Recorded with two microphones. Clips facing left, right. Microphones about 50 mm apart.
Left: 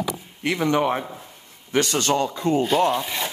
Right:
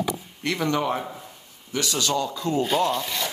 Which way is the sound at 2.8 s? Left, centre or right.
Centre.